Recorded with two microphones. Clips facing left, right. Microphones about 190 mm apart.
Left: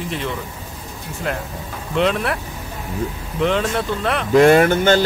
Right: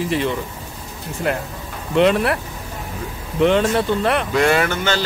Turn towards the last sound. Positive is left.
turn(degrees=50)  # may be behind; listen again after turning